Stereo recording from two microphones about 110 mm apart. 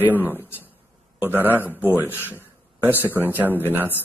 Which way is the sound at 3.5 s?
15° left (ahead or behind).